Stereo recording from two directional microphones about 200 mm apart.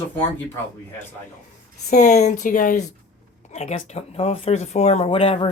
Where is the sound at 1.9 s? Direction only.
35° left (ahead or behind).